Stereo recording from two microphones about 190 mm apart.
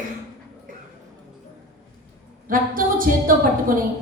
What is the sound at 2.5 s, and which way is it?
Speech, 50° right (ahead or behind).